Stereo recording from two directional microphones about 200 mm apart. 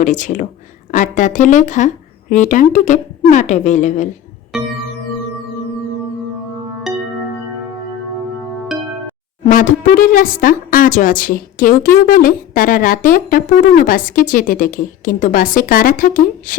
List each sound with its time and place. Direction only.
0.0 s a woman's voice: 40° left (ahead or behind)
6.9 s music: centre (ahead or behind)
9.4 s speech: 40° left (ahead or behind)